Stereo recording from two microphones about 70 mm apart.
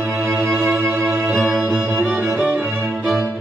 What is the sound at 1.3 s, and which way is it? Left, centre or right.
Music, centre.